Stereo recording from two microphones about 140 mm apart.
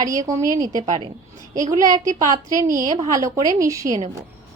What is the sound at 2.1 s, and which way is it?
Speech, 25° right (ahead or behind).